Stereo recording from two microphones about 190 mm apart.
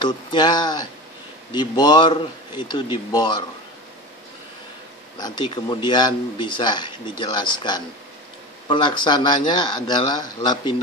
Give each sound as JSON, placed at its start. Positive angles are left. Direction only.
{"t": 0.0, "sound": "a man's voice", "side_deg": 25}
{"t": 5.2, "sound": "a man's voice", "side_deg": 25}